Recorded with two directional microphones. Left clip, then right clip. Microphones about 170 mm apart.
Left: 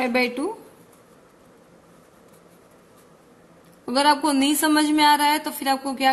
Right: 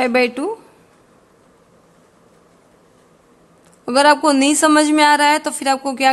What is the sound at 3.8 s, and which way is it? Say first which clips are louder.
Speech: right 7 dB; 50° right (ahead or behind).